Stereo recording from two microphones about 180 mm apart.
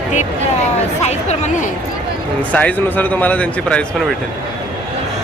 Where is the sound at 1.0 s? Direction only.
40° left (ahead or behind).